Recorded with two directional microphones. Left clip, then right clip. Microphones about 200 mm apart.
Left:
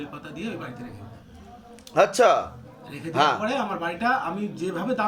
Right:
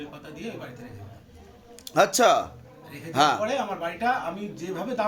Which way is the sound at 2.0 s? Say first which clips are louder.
Left 1 dB; 55° right (ahead or behind).